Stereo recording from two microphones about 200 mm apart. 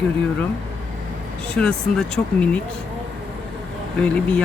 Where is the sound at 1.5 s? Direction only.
5° left (ahead or behind).